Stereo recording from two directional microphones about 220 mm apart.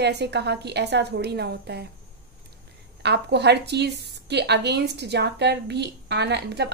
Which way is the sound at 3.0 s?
50° right (ahead or behind).